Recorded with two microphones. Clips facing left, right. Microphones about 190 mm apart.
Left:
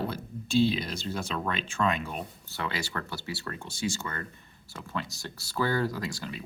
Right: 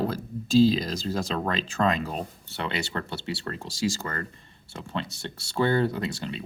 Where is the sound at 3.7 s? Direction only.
90° right.